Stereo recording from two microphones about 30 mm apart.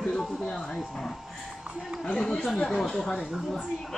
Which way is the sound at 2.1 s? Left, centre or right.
Centre.